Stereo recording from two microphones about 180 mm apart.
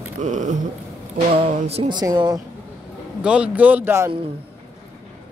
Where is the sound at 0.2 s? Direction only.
45° right (ahead or behind).